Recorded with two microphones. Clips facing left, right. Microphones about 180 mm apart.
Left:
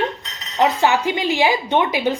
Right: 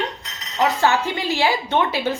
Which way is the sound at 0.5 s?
20° left (ahead or behind).